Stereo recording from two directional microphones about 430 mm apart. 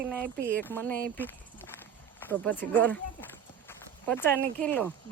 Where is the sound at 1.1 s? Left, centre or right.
Centre.